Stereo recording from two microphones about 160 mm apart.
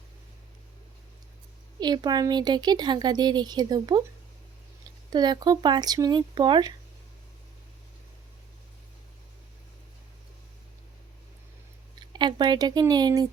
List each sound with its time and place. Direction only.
1.8 s speech: 25° right (ahead or behind)
5.1 s speech: 25° right (ahead or behind)
11.9 s speech: 30° right (ahead or behind)